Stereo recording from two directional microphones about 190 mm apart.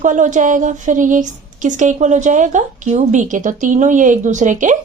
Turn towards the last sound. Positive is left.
turn(degrees=-40)  # may be behind; listen again after turning